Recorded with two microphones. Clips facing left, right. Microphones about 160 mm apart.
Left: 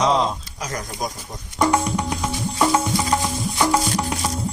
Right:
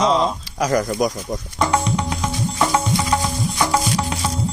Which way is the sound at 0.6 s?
80° right.